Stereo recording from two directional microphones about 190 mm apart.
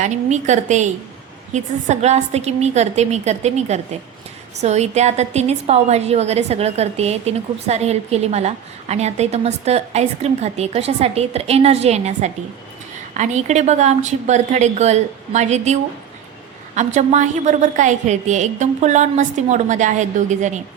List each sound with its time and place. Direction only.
0.0 s a woman's voice: 40° right (ahead or behind)